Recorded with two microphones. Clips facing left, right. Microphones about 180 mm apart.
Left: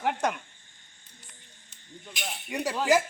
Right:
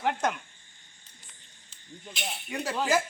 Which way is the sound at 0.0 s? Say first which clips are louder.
Even; 10° left (ahead or behind).